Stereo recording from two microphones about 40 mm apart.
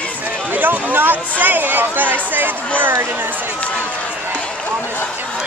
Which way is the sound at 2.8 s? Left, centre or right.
Right.